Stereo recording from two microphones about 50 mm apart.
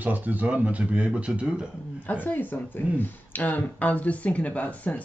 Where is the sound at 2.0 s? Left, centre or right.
Left.